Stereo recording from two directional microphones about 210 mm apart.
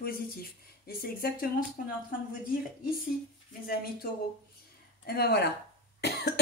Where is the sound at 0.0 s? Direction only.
45° left (ahead or behind).